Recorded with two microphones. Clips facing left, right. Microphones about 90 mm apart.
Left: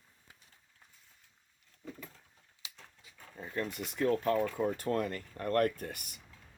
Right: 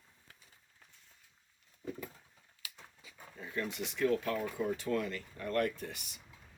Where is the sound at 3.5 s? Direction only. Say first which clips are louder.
Left 1 dB; 40° left (ahead or behind).